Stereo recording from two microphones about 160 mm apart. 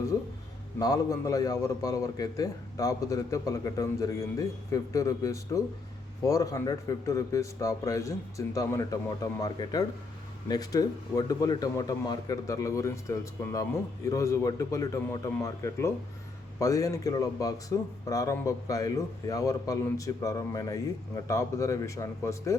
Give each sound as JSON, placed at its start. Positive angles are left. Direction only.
{"t": 0.8, "sound": "speech", "side_deg": 20}